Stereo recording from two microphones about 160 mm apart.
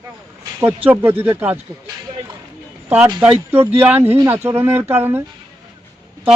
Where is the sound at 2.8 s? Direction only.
10° right (ahead or behind).